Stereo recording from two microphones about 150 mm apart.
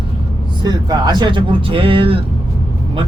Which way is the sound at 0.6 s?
25° right (ahead or behind).